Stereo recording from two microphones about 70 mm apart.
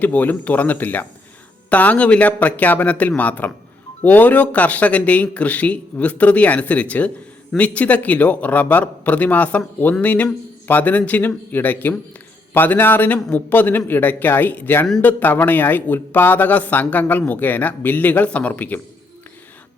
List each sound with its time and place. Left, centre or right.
0.0 s speech: left